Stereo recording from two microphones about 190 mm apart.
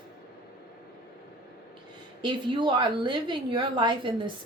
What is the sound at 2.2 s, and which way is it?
Speech, 25° right (ahead or behind).